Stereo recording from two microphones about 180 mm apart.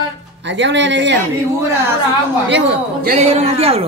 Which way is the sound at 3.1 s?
35° right (ahead or behind).